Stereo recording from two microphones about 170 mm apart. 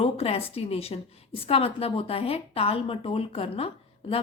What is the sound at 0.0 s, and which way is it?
Speech, 35° left (ahead or behind).